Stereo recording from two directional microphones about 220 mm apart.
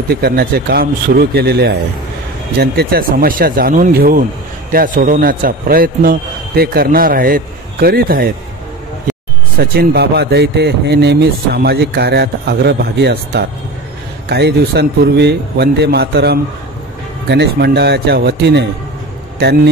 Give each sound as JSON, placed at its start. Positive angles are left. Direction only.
{"t": 0.1, "sound": "a man's voice", "side_deg": -45}
{"t": 9.6, "sound": "a man's voice", "side_deg": -45}